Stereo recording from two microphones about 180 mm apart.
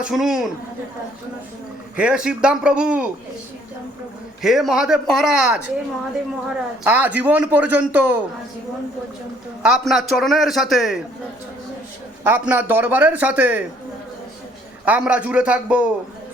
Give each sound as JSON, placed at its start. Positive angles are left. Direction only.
{"t": 0.0, "sound": "a man's voice", "side_deg": 0}
{"t": 2.0, "sound": "a man's voice", "side_deg": -5}
{"t": 4.4, "sound": "a man's voice", "side_deg": 0}
{"t": 6.8, "sound": "a man's voice", "side_deg": -10}
{"t": 9.6, "sound": "a man's voice", "side_deg": 0}
{"t": 12.2, "sound": "a man's voice", "side_deg": -10}
{"t": 14.8, "sound": "a man's voice", "side_deg": -5}